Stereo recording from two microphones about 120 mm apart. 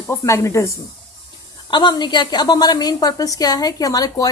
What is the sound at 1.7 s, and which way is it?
A woman's voice, 40° left (ahead or behind).